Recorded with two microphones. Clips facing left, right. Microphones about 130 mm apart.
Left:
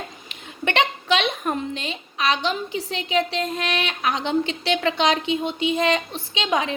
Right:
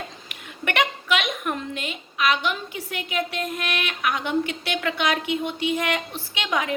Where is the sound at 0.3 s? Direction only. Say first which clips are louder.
Left 4 dB; 25° left (ahead or behind).